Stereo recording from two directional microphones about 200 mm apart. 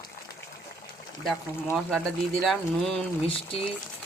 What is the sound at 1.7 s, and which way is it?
Speech, 5° left (ahead or behind).